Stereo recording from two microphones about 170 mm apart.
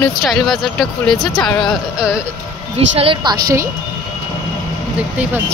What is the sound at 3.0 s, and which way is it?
Speech, 30° right (ahead or behind).